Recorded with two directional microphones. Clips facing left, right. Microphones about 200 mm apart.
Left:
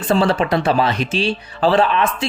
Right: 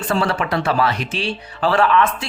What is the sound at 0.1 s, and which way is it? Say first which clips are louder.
Speech: left 5 dB; 25° left (ahead or behind).